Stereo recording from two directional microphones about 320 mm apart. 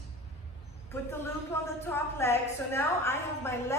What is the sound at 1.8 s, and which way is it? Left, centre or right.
A woman's voice, centre.